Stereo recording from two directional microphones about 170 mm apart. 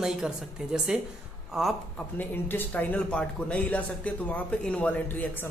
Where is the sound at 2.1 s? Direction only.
10° left (ahead or behind).